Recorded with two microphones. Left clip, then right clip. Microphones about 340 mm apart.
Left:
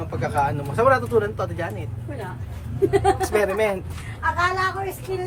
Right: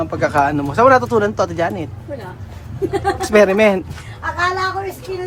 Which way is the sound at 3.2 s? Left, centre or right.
Right.